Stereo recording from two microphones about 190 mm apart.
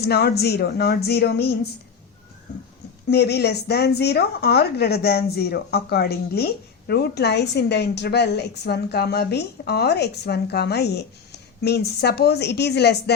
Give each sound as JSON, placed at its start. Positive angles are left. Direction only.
{"t": 0.0, "sound": "speech", "side_deg": 60}
{"t": 3.1, "sound": "speech", "side_deg": 60}